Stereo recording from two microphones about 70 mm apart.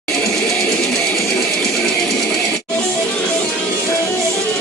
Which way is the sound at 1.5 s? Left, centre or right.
Centre.